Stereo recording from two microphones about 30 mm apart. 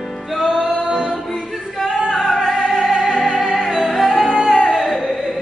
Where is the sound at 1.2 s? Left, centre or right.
Centre.